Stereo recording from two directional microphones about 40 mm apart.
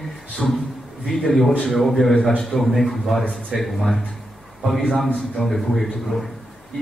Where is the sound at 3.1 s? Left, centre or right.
Centre.